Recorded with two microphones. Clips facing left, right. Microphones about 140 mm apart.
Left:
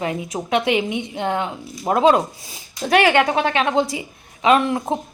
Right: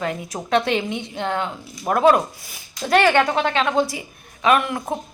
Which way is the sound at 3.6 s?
20° left (ahead or behind).